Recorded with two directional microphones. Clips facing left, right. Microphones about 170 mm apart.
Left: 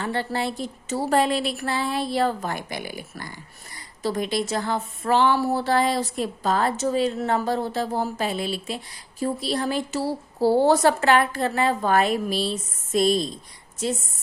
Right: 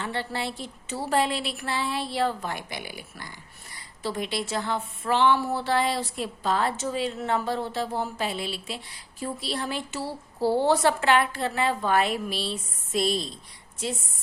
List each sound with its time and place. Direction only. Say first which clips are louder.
0.0 s a woman's voice: left 5 dB; 45° left (ahead or behind)